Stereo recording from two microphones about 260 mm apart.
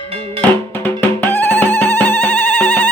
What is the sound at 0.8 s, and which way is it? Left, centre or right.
Music, centre.